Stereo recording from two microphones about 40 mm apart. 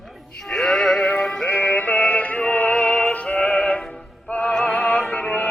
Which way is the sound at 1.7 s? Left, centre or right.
Left.